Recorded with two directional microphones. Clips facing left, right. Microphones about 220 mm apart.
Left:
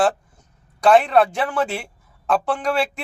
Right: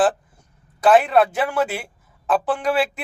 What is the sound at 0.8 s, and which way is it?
Speech, 5° right (ahead or behind).